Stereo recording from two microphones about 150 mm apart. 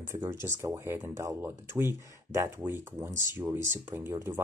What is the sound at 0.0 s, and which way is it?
Speech, 15° right (ahead or behind).